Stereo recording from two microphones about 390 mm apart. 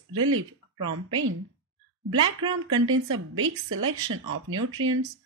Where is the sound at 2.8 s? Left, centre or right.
Right.